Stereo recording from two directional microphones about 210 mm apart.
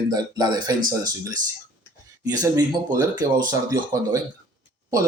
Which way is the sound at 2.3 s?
15° right (ahead or behind).